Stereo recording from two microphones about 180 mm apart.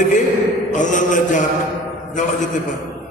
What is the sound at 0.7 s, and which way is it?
Speech, 45° left (ahead or behind).